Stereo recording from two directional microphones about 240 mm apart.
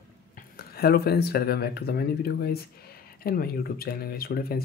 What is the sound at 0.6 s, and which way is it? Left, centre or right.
Speech, left.